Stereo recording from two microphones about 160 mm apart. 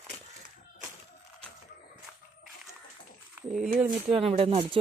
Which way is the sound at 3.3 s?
Centre (ahead or behind).